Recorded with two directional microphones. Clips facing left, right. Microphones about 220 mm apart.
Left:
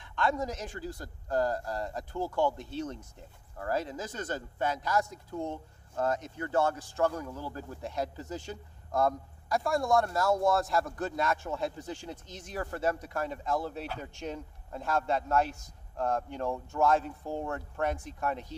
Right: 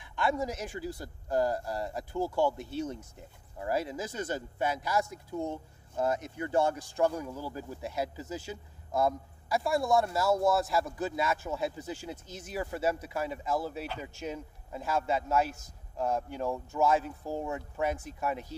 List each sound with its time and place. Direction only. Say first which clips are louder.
0.0 s speech: even; 10° right (ahead or behind)